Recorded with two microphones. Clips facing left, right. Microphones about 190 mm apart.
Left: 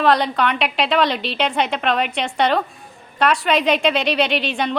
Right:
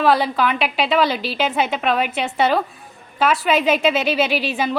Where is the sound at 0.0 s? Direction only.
5° right (ahead or behind).